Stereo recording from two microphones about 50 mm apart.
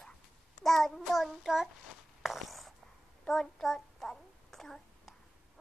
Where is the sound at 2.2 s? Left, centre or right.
Centre.